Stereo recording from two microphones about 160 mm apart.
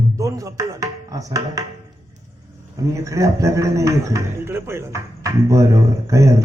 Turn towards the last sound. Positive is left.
turn(degrees=-20)  # may be behind; listen again after turning